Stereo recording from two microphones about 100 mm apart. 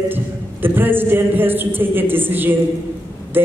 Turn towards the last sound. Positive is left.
turn(degrees=-20)  # may be behind; listen again after turning